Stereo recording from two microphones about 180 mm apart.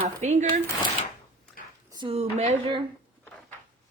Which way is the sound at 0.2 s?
40° right (ahead or behind).